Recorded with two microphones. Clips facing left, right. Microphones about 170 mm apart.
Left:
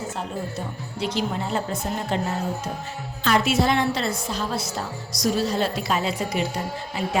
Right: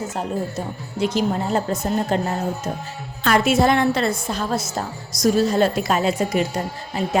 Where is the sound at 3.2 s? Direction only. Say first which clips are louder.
Right 4 dB; 50° right (ahead or behind).